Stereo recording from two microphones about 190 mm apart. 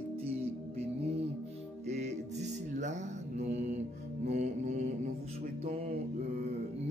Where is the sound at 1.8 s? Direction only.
35° right (ahead or behind).